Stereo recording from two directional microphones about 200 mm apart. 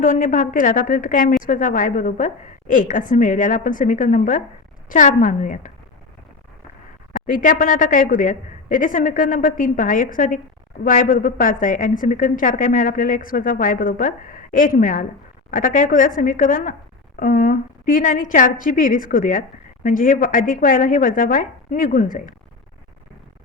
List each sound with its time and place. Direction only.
0.0 s a woman's voice: 40° left (ahead or behind)
7.3 s a woman's voice: 40° left (ahead or behind)